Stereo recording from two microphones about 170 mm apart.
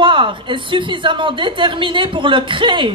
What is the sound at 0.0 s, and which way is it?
A woman's voice, 30° right (ahead or behind).